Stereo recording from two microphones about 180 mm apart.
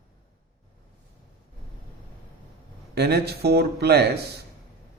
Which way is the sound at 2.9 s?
65° right (ahead or behind).